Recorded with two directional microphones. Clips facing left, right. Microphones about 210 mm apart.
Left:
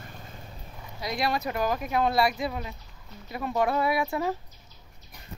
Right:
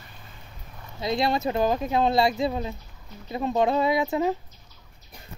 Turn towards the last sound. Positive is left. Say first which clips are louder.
# right 4 dB
turn(degrees=-20)  # may be behind; listen again after turning